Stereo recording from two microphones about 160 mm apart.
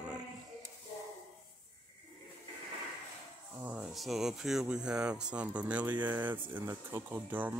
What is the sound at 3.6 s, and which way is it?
Speech, 5° right (ahead or behind).